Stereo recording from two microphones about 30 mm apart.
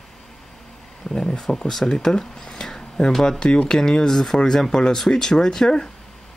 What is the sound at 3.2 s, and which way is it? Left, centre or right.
Mantra, left.